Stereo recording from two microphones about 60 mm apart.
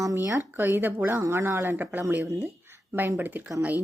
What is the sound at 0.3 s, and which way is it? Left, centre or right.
Speech, right.